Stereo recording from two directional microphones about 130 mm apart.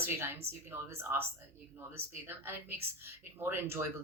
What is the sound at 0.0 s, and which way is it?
Speech, 20° right (ahead or behind).